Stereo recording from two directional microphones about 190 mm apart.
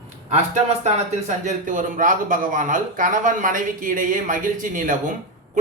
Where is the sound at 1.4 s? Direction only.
45° right (ahead or behind).